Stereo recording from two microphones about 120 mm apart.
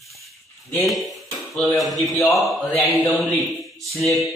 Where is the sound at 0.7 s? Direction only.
Centre (ahead or behind).